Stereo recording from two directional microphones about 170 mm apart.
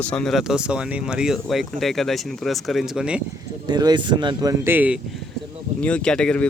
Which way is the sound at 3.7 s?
25° right (ahead or behind).